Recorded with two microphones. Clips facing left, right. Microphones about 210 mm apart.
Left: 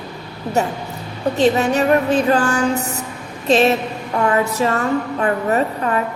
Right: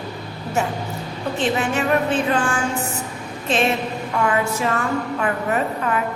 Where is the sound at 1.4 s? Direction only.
40° left (ahead or behind).